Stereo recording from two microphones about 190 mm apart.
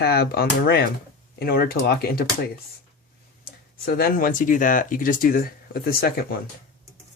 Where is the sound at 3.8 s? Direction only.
50° left (ahead or behind).